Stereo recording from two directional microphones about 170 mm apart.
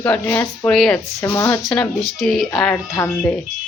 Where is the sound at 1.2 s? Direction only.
15° left (ahead or behind).